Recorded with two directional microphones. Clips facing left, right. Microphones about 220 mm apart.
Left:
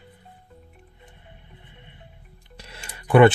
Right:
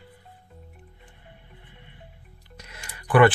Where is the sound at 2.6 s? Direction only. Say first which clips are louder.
Left 2 dB; 30° left (ahead or behind).